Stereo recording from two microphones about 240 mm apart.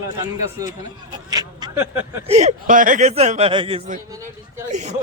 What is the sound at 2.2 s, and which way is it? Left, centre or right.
A man's voice, right.